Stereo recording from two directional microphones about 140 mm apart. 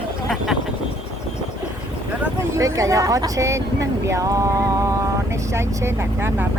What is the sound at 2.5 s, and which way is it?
Speech, 20° right (ahead or behind).